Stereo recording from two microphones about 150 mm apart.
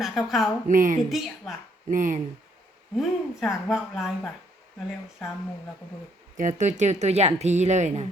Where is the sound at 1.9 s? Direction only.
60° right (ahead or behind).